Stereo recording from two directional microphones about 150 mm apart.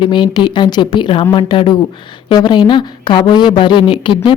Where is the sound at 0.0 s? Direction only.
30° left (ahead or behind).